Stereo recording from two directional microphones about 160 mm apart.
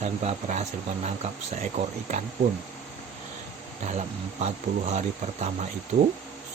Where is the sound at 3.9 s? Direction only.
45° right (ahead or behind).